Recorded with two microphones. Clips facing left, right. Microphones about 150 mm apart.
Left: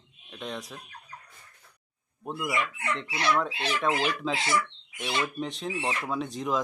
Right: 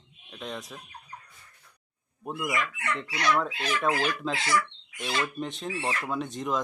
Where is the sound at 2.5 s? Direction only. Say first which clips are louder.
Left 1 dB; 25° left (ahead or behind).